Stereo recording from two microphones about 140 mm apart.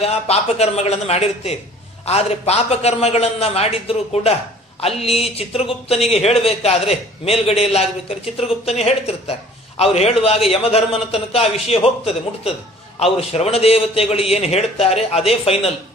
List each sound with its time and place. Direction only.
0.0 s a man's voice: 50° left (ahead or behind)